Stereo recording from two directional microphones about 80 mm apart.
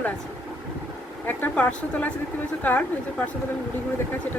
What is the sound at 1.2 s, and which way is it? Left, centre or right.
Speech, centre.